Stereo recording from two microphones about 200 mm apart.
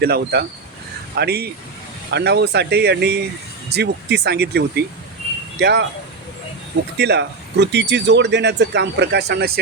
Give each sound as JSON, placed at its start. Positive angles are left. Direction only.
{"t": 0.0, "sound": "speech", "side_deg": -50}
{"t": 6.9, "sound": "speech", "side_deg": -55}